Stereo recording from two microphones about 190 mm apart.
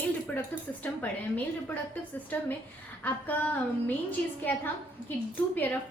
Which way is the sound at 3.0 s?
10° left (ahead or behind).